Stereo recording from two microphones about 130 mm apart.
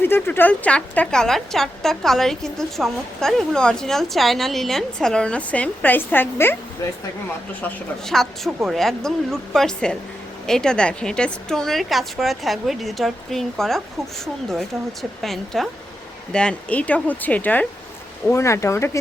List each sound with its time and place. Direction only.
0.0 s speech: 15° left (ahead or behind)
7.6 s speech: 5° left (ahead or behind)
15.2 s speech: centre (ahead or behind); by 18.9 s 20° left (ahead or behind)